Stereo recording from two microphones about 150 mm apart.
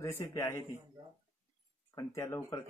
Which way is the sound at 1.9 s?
20° left (ahead or behind).